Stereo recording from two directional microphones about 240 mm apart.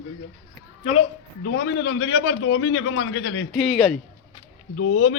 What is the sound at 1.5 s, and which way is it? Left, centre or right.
A man's voice, left.